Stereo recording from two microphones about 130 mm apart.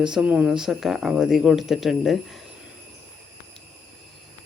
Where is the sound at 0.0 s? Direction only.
5° right (ahead or behind).